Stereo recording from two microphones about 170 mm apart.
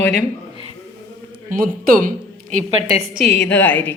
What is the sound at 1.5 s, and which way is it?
Speech, 55° right (ahead or behind).